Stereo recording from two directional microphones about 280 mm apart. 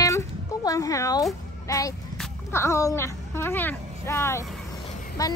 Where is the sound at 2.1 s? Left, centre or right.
Centre.